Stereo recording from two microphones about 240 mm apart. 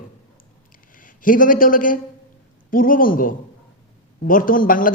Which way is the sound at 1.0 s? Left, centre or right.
Left.